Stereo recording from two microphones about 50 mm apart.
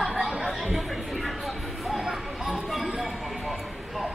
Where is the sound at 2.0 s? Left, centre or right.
Centre.